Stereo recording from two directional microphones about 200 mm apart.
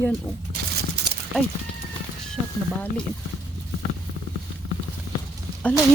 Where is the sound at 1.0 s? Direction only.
55° right (ahead or behind).